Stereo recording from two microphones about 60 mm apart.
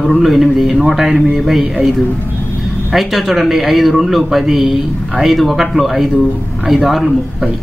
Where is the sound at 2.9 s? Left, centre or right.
Centre.